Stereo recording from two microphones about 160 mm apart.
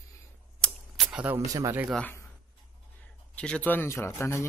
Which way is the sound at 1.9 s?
10° left (ahead or behind).